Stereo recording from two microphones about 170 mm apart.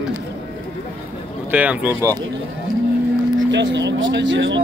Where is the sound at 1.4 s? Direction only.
10° right (ahead or behind).